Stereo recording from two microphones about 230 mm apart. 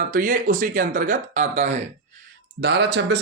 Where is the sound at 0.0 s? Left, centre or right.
Right.